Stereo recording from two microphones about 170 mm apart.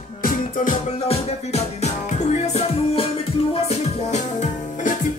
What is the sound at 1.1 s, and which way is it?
Music, 40° left (ahead or behind).